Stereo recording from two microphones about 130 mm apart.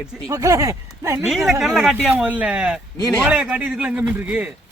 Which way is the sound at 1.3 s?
Centre (ahead or behind).